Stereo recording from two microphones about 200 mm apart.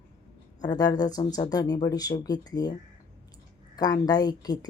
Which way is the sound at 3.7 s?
20° left (ahead or behind).